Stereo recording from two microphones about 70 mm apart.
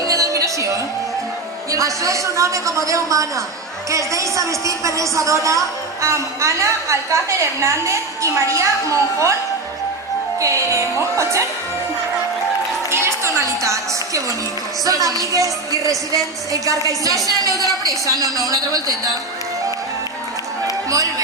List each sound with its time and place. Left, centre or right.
0.1 s music: right
1.7 s a woman's voice: right
10.4 s a woman's voice: right
12.9 s music: right
14.8 s a woman's voice: right
20.7 s music: right